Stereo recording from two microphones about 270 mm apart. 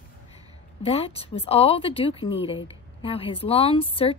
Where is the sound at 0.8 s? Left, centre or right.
Left.